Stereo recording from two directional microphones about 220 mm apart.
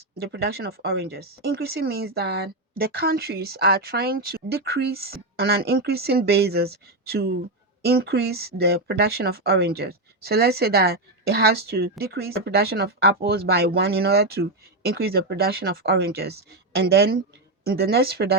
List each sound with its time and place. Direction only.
0.3 s speech: 45° right (ahead or behind)
7.8 s speech: 45° right (ahead or behind)